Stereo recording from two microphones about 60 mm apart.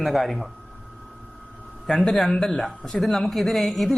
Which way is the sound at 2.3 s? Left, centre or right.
Centre.